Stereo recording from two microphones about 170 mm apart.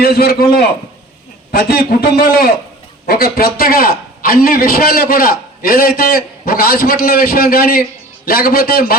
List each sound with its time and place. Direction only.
0.0 s a man's voice: 65° left (ahead or behind)
1.5 s a man's voice: 65° left (ahead or behind)